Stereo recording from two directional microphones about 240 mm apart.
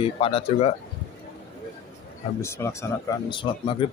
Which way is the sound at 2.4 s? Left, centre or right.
Centre.